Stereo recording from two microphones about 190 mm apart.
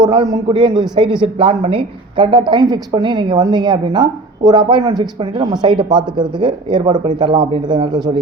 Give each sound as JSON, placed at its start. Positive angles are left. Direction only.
{"t": 0.0, "sound": "a man's voice", "side_deg": -25}